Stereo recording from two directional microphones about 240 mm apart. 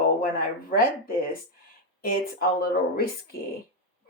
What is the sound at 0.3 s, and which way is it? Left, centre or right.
Speech, left.